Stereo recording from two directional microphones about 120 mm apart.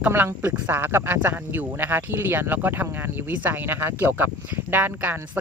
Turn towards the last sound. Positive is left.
turn(degrees=-15)  # may be behind; listen again after turning